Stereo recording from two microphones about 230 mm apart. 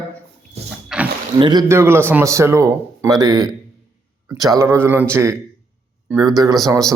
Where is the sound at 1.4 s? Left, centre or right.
Centre.